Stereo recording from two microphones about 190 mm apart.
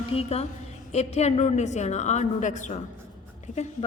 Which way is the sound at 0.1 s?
30° left (ahead or behind).